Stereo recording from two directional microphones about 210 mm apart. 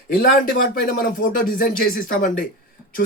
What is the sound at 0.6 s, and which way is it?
Speech, 40° left (ahead or behind).